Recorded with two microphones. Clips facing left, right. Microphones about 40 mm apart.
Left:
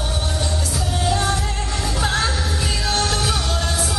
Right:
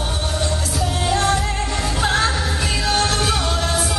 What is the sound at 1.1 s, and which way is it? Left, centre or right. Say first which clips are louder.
Music: right 3 dB; centre.